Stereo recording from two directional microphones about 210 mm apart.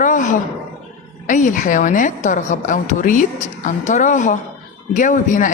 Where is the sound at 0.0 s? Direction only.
35° left (ahead or behind).